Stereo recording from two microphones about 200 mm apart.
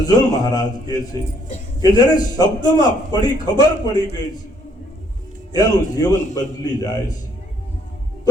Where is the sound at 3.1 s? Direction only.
20° left (ahead or behind).